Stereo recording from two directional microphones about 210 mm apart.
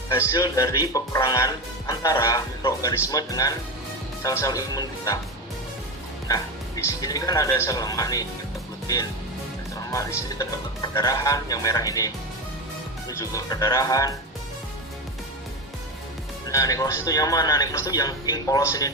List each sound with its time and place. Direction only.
0.2 s speech: 15° left (ahead or behind)
6.2 s speech: 15° left (ahead or behind)
9.9 s speech: 15° left (ahead or behind)
16.5 s speech: 15° left (ahead or behind)